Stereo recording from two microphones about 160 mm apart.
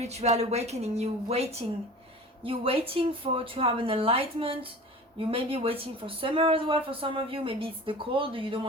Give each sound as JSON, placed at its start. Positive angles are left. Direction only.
{"t": 0.0, "sound": "speech", "side_deg": -40}